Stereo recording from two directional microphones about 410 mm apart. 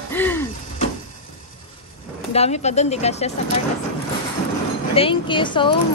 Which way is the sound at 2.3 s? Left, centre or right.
Centre.